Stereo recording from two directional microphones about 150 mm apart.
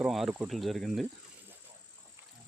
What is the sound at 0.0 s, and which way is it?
Speech, centre (ahead or behind).